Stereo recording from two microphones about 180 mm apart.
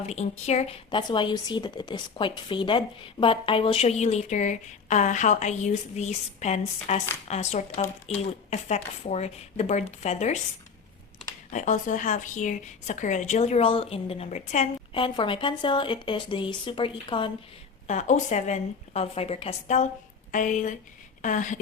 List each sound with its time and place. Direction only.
0.0 s speech: 35° left (ahead or behind)
11.5 s speech: 45° left (ahead or behind)
14.9 s speech: 30° left (ahead or behind)
17.8 s a woman's voice: 40° left (ahead or behind)